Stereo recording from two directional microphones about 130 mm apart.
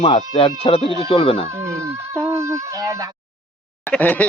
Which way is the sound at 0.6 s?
40° left (ahead or behind).